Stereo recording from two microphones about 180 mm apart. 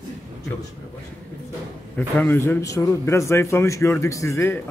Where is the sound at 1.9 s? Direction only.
10° left (ahead or behind).